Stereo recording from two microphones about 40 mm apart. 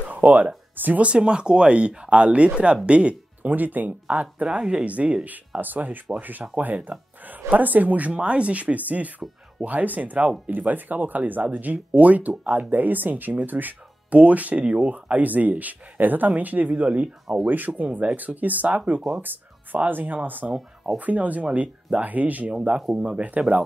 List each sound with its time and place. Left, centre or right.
0.1 s speech: right
1.0 s speech: right
3.4 s speech: right
4.5 s speech: right
4.8 s speech: right
5.6 s speech: right
8.1 s speech: right
19.9 s speech: right
22.5 s speech: right